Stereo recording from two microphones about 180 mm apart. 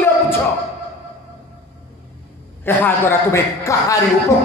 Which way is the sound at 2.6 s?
10° left (ahead or behind).